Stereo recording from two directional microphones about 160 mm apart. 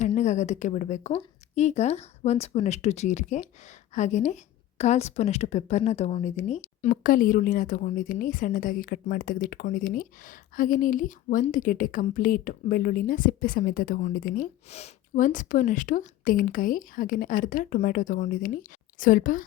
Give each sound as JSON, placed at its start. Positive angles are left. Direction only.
{"t": 0.2, "sound": "speech", "side_deg": 50}
{"t": 14.7, "sound": "speech", "side_deg": 40}